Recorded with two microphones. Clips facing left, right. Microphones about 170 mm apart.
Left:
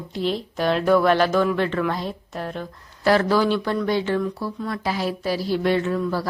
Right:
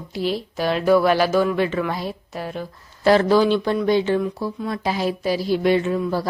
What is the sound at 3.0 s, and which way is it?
Speech, 20° right (ahead or behind).